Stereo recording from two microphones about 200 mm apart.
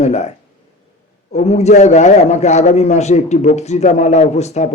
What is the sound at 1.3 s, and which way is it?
A man's voice, 35° left (ahead or behind).